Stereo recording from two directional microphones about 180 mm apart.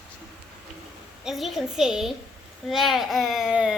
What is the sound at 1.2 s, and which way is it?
A woman's voice, centre (ahead or behind).